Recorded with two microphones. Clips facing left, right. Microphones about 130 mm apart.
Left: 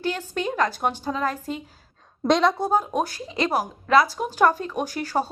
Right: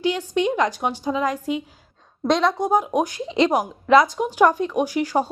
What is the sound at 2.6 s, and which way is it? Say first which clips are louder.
Speech: right 3 dB; 15° right (ahead or behind).